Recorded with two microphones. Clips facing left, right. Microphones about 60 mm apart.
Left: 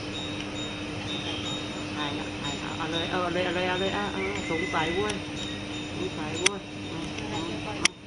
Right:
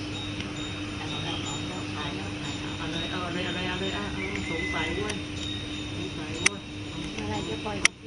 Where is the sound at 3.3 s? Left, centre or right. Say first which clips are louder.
Left 4 dB; centre.